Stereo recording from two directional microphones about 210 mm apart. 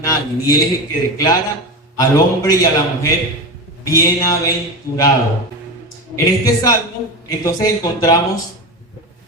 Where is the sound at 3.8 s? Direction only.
15° left (ahead or behind).